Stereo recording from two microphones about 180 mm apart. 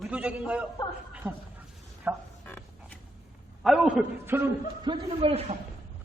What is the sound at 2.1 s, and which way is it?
Speech, 10° right (ahead or behind).